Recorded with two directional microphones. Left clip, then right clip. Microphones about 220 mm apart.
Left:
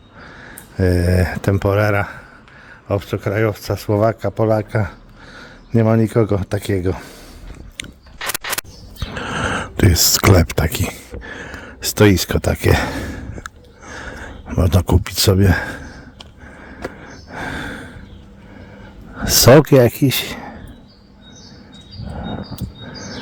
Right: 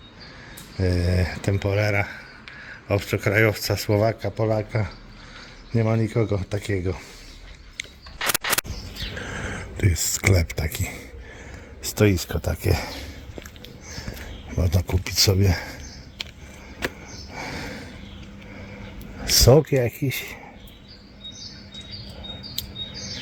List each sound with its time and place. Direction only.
0.8 s speech: 40° left (ahead or behind)
2.9 s speech: 20° left (ahead or behind); by 7.0 s 40° left (ahead or behind)
7.8 s a sound: 35° left (ahead or behind)
8.2 s a sound: centre (ahead or behind)
9.1 s a sound: 40° left (ahead or behind)
11.3 s speech: 40° left (ahead or behind)
14.5 s speech: 40° left (ahead or behind)
17.3 s gasp: 30° left (ahead or behind)
19.2 s speech: 40° left (ahead or behind)